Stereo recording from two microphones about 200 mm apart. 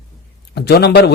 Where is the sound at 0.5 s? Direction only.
55° left (ahead or behind).